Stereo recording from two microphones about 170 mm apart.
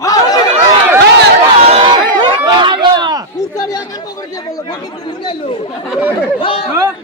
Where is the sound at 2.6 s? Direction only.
25° right (ahead or behind).